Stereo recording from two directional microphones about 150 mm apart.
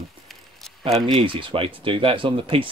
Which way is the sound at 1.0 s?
35° right (ahead or behind).